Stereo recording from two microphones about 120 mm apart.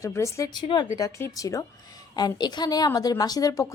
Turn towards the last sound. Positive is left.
turn(degrees=30)  # may be behind; listen again after turning